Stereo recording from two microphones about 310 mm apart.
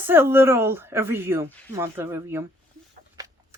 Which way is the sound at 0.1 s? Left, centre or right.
Centre.